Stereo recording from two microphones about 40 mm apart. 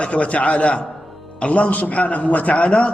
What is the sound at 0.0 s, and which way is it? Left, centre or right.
A man's voice, left.